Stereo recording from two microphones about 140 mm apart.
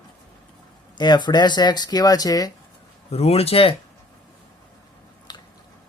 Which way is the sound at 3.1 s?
45° left (ahead or behind).